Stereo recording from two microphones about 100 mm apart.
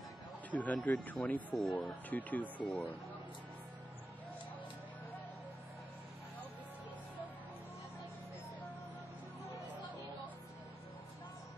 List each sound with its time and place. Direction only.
0.5 s speech: 15° left (ahead or behind)